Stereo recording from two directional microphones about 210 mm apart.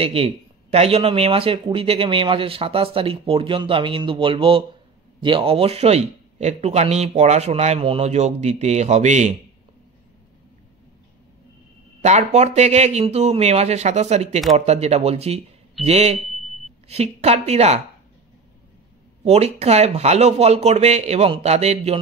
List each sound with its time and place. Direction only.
0.0 s speech: 25° right (ahead or behind)
12.0 s speech: 30° right (ahead or behind)
19.2 s speech: 30° right (ahead or behind)